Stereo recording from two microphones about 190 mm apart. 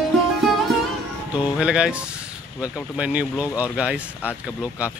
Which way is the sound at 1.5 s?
5° right (ahead or behind).